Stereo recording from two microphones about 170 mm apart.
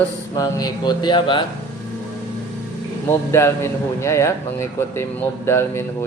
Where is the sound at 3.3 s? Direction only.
15° left (ahead or behind).